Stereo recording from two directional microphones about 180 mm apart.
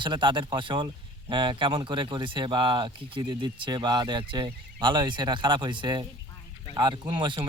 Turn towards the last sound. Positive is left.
turn(degrees=-25)  # may be behind; listen again after turning